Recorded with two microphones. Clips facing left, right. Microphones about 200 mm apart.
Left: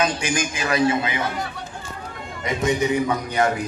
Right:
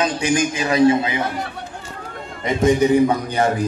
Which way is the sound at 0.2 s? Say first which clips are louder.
Right 6 dB; 30° right (ahead or behind).